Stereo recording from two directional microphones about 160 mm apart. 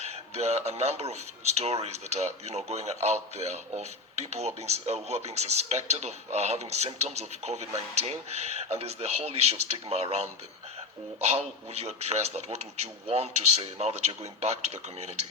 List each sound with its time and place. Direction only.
0.0 s speech: 40° right (ahead or behind)